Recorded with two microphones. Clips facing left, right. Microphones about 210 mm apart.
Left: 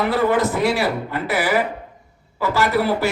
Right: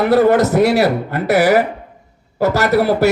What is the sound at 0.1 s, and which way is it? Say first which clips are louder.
A man's voice: right 7 dB; 40° right (ahead or behind).